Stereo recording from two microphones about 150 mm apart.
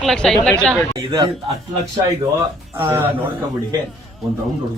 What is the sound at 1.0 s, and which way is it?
Speech, 30° right (ahead or behind).